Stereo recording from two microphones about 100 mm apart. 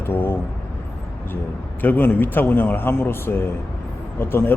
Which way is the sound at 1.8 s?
20° left (ahead or behind).